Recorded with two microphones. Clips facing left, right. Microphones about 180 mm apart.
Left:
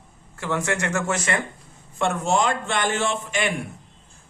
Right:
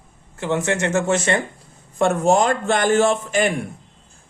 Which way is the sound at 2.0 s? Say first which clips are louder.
Right 6 dB; 40° right (ahead or behind).